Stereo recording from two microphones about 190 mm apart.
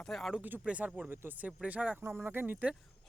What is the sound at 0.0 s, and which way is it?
Speech, centre (ahead or behind).